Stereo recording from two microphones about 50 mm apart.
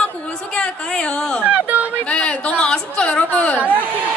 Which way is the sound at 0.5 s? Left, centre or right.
Centre.